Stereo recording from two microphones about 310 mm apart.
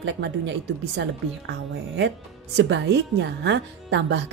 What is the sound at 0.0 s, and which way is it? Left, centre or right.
A woman's voice, right.